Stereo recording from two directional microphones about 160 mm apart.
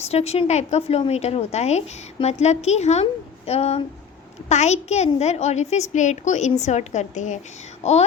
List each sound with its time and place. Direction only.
0.0 s a woman's voice: 40° left (ahead or behind)